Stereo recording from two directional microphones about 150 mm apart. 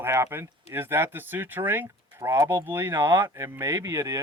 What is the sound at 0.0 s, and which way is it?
Speech, 15° right (ahead or behind).